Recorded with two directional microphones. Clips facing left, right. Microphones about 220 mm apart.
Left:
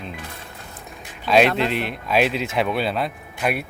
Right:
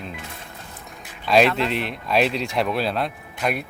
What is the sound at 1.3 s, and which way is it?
Speech, centre (ahead or behind).